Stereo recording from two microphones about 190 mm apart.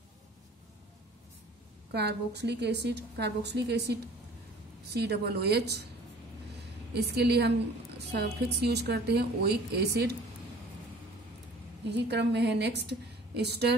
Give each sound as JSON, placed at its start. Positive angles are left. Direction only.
{"t": 1.9, "sound": "a woman's voice", "side_deg": -60}
{"t": 6.9, "sound": "a woman's voice", "side_deg": -60}
{"t": 11.9, "sound": "a woman's voice", "side_deg": -65}